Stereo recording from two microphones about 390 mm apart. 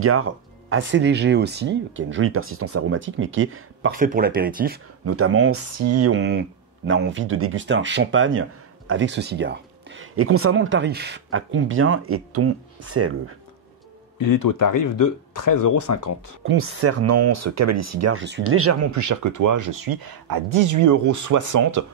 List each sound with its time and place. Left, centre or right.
0.0 s speech: right
5.0 s speech: right
14.2 s speech: left
16.4 s speech: right
18.2 s speech: right